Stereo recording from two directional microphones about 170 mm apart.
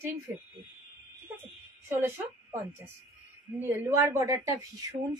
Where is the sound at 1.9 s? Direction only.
15° right (ahead or behind).